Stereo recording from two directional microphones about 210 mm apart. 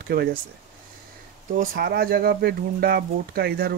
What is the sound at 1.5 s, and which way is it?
Speech, 40° right (ahead or behind).